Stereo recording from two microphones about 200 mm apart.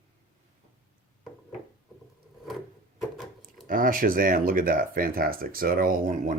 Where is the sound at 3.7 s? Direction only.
45° right (ahead or behind).